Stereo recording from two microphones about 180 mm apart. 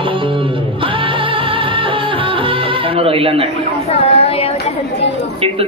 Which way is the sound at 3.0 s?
30° right (ahead or behind).